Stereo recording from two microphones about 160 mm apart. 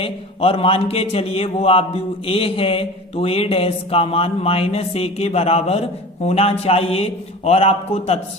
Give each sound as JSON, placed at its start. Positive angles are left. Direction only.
{"t": 0.0, "sound": "a man's voice", "side_deg": 35}